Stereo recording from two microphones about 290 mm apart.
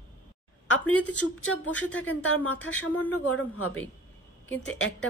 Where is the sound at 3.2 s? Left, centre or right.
Left.